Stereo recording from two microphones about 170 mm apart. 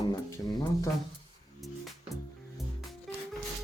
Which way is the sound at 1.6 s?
Centre (ahead or behind).